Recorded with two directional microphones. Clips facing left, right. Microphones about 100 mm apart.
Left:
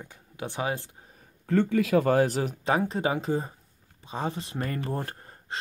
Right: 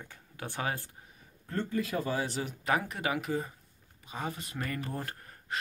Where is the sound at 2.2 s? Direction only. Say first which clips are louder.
Left 10 dB; 40° left (ahead or behind).